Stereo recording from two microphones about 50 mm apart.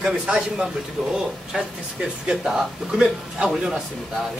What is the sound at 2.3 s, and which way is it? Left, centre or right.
Speech, centre.